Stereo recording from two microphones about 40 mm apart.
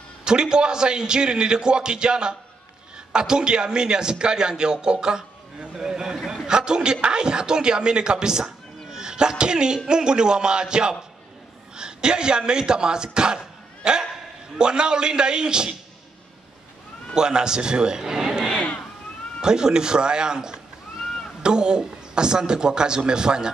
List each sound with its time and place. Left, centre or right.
0.2 s a man's voice: centre
17.1 s a man's voice: centre